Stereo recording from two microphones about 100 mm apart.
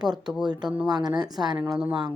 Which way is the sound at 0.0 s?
45° right (ahead or behind).